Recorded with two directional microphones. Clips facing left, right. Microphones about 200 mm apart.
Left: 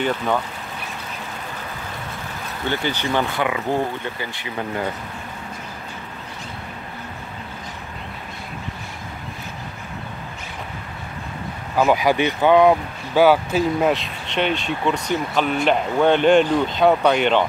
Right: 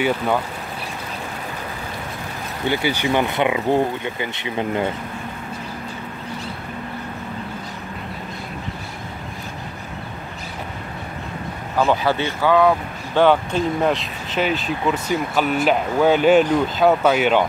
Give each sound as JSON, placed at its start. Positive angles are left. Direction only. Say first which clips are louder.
{"t": 2.7, "sound": "speech", "louder": "right 3 dB", "side_deg": -10}
{"t": 11.8, "sound": "speech", "louder": "left 2 dB", "side_deg": 10}
{"t": 13.1, "sound": "speech", "louder": "left 1 dB", "side_deg": 5}